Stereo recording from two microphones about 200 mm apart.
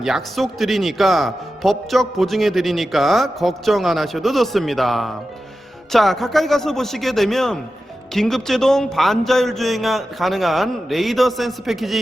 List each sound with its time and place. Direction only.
0.0 s speech: centre (ahead or behind)